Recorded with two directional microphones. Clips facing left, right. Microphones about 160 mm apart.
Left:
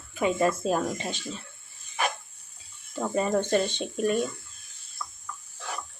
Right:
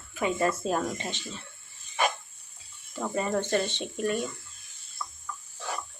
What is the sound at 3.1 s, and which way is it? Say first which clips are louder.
Speech: left 3 dB; 20° left (ahead or behind).